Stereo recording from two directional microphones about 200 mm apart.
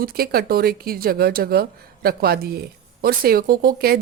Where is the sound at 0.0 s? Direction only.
50° right (ahead or behind).